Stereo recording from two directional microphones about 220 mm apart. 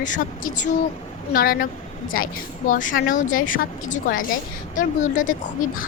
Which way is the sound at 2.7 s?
35° left (ahead or behind).